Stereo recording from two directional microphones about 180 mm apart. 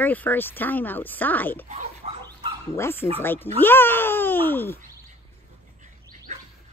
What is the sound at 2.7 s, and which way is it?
A child's voice, 15° left (ahead or behind).